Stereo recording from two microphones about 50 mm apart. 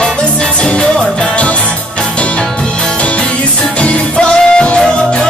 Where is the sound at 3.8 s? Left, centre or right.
Left.